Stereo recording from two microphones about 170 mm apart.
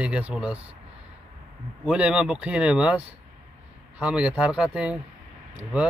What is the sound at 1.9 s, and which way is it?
Speech, 5° right (ahead or behind).